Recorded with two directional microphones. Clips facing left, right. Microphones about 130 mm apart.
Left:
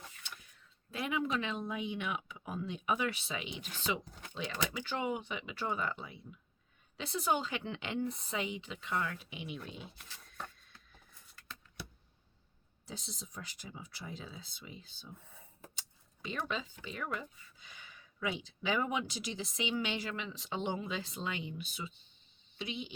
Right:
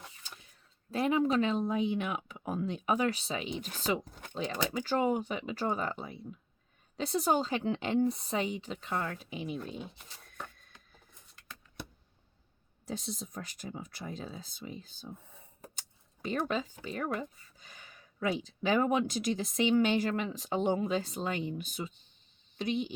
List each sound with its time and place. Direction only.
0.2 s a sound: 35° right (ahead or behind)
0.9 s speech: 35° right (ahead or behind)
12.8 s speech: 50° right (ahead or behind)
16.2 s speech: 45° right (ahead or behind)